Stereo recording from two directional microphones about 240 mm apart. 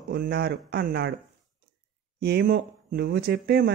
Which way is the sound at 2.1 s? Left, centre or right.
Right.